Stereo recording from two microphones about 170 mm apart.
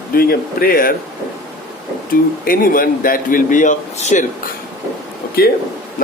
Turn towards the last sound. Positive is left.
turn(degrees=60)  # may be behind; listen again after turning